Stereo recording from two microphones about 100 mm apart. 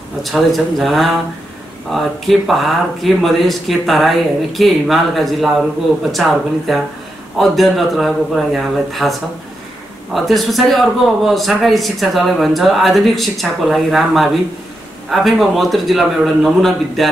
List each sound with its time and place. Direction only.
0.2 s a man's voice: centre (ahead or behind)